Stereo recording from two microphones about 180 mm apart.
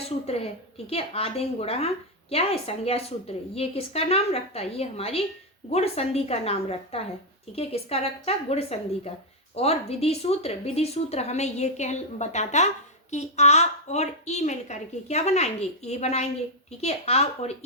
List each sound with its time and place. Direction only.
0.3 s speech: 35° left (ahead or behind)